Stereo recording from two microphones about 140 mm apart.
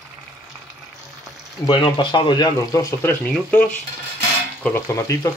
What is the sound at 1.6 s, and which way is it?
Speech, 35° left (ahead or behind).